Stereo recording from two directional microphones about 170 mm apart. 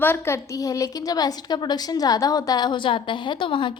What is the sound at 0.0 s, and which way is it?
A woman's voice, 15° left (ahead or behind).